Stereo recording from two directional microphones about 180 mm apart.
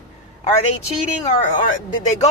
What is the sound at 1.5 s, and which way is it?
Speech, 45° left (ahead or behind).